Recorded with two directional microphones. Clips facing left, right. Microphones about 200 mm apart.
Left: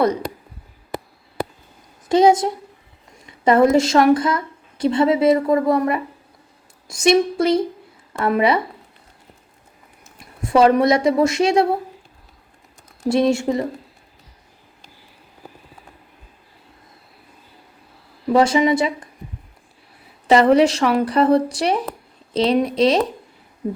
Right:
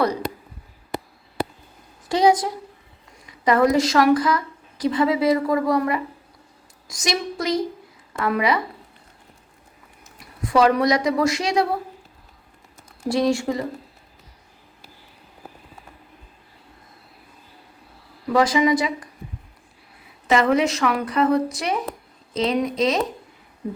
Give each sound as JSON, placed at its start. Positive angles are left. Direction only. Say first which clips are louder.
{"t": 2.0, "sound": "a woman's voice", "louder": "left 4 dB", "side_deg": 25}
{"t": 10.4, "sound": "a woman's voice", "louder": "left 3 dB", "side_deg": 25}
{"t": 13.1, "sound": "a woman's voice", "louder": "left 3 dB", "side_deg": 25}
{"t": 18.3, "sound": "a woman's voice", "louder": "left 3 dB", "side_deg": 25}
{"t": 20.2, "sound": "speech", "louder": "left 5 dB", "side_deg": 30}